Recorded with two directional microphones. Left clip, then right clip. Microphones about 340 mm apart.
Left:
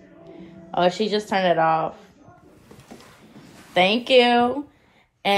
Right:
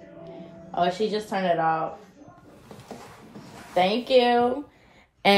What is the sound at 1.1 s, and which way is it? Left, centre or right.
Speech, left.